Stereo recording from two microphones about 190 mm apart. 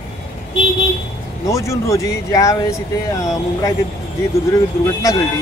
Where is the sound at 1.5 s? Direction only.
15° left (ahead or behind).